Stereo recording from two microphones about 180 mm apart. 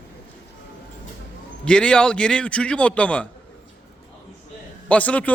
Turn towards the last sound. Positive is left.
turn(degrees=10)  # may be behind; listen again after turning